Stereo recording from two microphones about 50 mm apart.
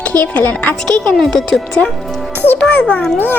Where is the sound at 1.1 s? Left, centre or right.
Centre.